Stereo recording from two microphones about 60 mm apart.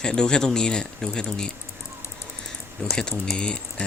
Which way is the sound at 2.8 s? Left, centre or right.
Centre.